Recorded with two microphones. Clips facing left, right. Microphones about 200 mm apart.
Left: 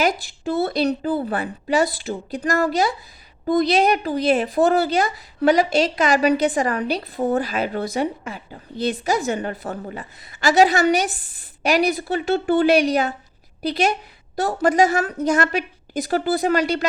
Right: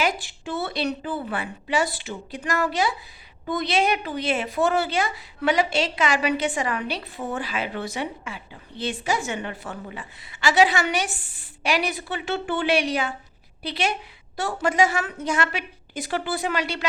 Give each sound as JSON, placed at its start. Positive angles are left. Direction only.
{"t": 0.0, "sound": "a woman's voice", "side_deg": 40}